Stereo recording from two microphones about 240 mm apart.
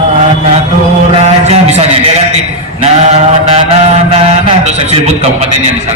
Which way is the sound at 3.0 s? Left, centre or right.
Right.